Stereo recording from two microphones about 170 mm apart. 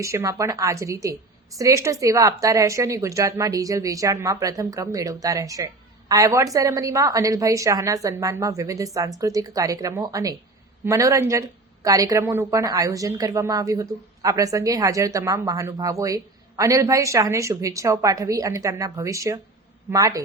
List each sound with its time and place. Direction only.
0.0 s speech: 15° right (ahead or behind)